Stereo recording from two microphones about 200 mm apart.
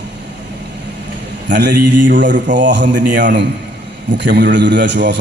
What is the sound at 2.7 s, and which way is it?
A man's voice, 60° right (ahead or behind).